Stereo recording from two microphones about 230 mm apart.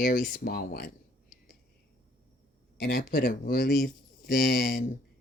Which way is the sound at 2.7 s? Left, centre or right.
Left.